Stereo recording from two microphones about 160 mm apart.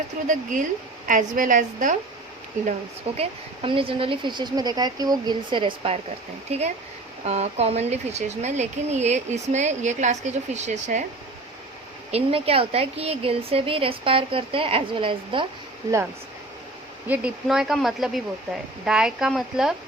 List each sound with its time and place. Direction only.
0.3 s speech: 55° right (ahead or behind)
3.2 s a woman's voice: 35° right (ahead or behind)
12.1 s a woman's voice: 35° right (ahead or behind)
17.1 s speech: 5° right (ahead or behind)